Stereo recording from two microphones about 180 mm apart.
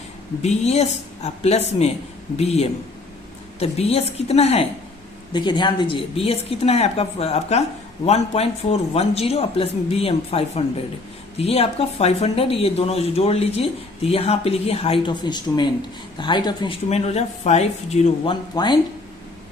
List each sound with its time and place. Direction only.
0.4 s speech: 35° left (ahead or behind)
5.3 s speech: 25° left (ahead or behind)
18.5 s speech: 25° left (ahead or behind)